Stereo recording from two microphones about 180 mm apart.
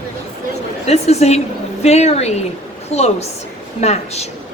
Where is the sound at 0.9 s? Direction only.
35° left (ahead or behind).